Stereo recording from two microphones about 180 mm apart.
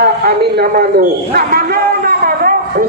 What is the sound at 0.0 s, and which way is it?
A man's voice, 60° right (ahead or behind).